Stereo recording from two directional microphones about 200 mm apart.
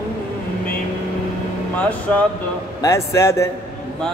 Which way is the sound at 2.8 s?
15° left (ahead or behind).